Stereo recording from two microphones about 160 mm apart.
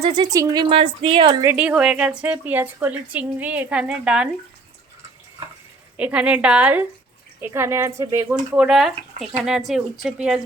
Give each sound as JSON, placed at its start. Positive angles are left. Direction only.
{"t": 0.0, "sound": "speech", "side_deg": -25}
{"t": 1.5, "sound": "a woman's voice", "side_deg": -5}
{"t": 6.0, "sound": "a woman's voice", "side_deg": -10}
{"t": 8.5, "sound": "speech", "side_deg": -5}